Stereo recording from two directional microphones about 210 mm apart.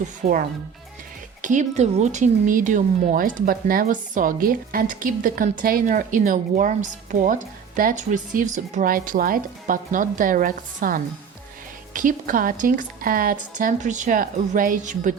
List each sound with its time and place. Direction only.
0.0 s speech: 40° right (ahead or behind)